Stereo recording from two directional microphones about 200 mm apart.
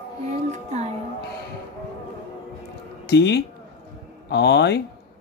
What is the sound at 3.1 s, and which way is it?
Speech, 60° left (ahead or behind).